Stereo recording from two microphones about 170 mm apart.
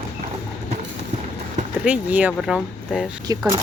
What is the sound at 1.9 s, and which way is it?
A woman's voice, 10° right (ahead or behind).